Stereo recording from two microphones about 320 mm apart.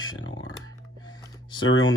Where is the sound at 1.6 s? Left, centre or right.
Left.